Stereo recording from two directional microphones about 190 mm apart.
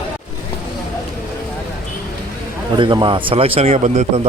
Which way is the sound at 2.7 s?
25° right (ahead or behind).